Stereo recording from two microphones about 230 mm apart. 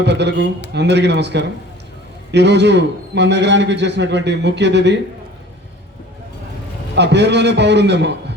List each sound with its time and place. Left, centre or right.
0.0 s a man's voice: right
6.9 s a man's voice: right